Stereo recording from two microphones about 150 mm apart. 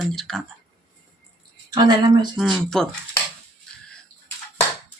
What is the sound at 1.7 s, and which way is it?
Speech, 30° right (ahead or behind).